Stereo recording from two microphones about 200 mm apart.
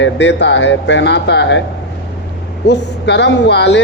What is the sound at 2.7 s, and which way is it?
A man's voice, 60° left (ahead or behind).